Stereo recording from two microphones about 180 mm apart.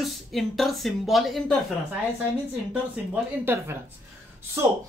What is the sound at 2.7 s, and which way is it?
Speech, 10° right (ahead or behind).